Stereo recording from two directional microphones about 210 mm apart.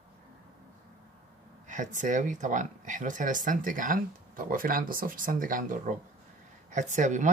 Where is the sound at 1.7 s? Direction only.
35° right (ahead or behind).